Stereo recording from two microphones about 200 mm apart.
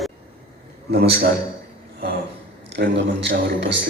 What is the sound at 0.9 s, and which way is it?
Speech, 55° right (ahead or behind).